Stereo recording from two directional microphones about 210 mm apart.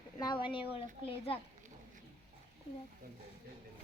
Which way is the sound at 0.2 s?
20° left (ahead or behind).